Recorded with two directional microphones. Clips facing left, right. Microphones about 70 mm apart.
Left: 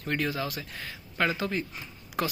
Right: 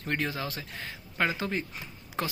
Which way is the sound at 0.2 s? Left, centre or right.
Right.